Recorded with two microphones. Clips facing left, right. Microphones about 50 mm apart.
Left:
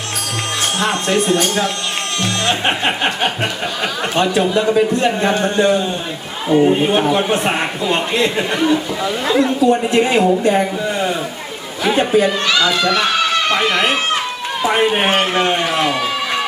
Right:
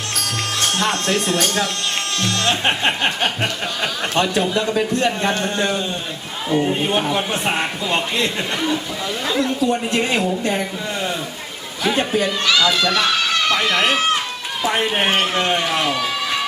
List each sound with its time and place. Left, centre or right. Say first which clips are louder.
1.0 s a man's voice: left 4 dB; left
3.2 s a woman's voice: left 2 dB; centre
7.4 s a woman's voice: left 3 dB; centre
14.6 s a woman's voice: left 4 dB; centre